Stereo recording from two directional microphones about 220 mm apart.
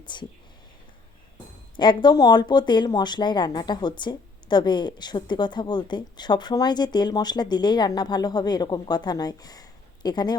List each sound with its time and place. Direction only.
0.0 s speech: 20° left (ahead or behind)
1.7 s speech: 20° left (ahead or behind)